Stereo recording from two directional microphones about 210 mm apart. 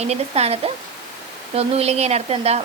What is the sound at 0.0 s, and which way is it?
A woman's voice, 30° right (ahead or behind).